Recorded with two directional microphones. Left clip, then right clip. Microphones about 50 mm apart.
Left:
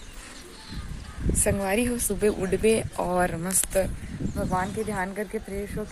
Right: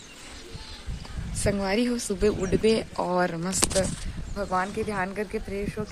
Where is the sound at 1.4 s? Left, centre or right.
Right.